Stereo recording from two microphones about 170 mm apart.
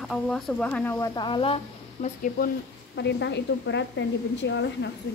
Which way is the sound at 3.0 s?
90° left.